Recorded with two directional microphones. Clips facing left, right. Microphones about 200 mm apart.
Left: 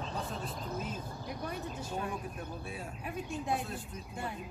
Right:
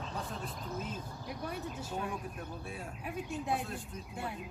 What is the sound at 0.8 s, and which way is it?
Speech, 5° right (ahead or behind).